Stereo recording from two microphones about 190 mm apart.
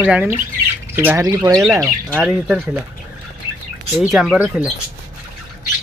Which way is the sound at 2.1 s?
5° right (ahead or behind).